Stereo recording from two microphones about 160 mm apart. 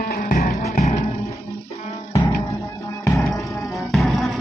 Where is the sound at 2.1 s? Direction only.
20° left (ahead or behind).